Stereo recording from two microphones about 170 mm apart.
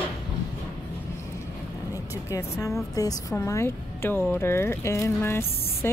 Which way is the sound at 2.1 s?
20° left (ahead or behind).